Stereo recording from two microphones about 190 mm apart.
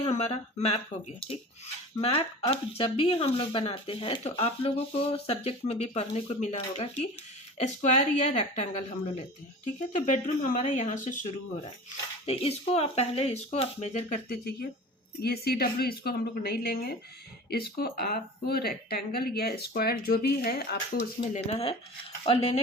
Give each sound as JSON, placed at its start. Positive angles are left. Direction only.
{"t": 0.0, "sound": "speech", "side_deg": 35}
{"t": 9.9, "sound": "speech", "side_deg": 45}
{"t": 12.2, "sound": "speech", "side_deg": 30}
{"t": 14.3, "sound": "speech", "side_deg": 55}
{"t": 21.3, "sound": "speech", "side_deg": 30}